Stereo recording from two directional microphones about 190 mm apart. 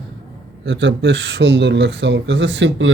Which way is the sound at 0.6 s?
70° right (ahead or behind).